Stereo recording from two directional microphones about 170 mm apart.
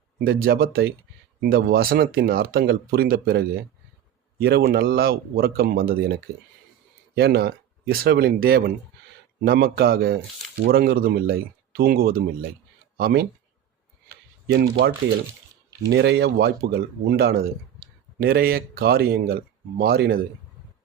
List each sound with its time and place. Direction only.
0.3 s speech: 60° right (ahead or behind)
7.2 s speech: 70° right (ahead or behind)
14.4 s speech: 70° right (ahead or behind)